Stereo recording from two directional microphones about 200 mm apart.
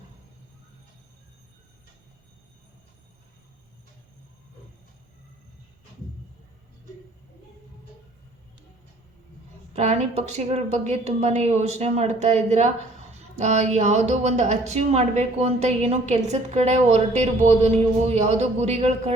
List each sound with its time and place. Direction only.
9.7 s a woman's voice: 35° right (ahead or behind)